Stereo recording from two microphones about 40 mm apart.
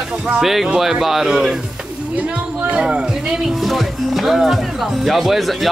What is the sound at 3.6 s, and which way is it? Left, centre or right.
Speech, centre.